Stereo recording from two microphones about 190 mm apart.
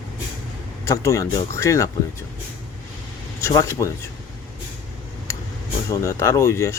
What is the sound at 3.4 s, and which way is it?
Speech, 15° left (ahead or behind).